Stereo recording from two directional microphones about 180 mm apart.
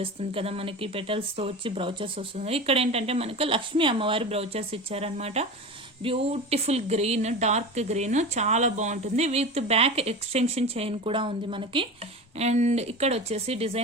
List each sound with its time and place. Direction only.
0.0 s speech: 30° right (ahead or behind)
12.4 s speech: 40° right (ahead or behind)